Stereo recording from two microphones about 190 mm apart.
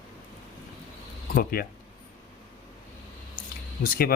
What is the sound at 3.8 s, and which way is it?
Speech, 50° left (ahead or behind).